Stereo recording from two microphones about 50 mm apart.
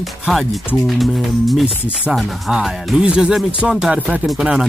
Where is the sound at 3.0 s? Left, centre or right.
Centre.